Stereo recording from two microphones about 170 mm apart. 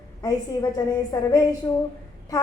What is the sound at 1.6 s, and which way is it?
Speech, 20° left (ahead or behind).